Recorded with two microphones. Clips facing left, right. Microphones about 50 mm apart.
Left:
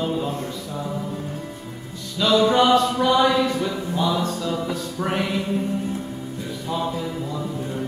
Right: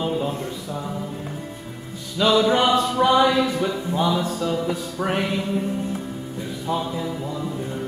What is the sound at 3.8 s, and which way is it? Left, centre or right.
Music, right.